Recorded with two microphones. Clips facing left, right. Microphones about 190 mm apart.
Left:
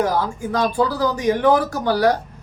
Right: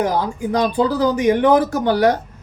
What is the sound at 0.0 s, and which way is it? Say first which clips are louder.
Speech: right 1 dB; 20° right (ahead or behind).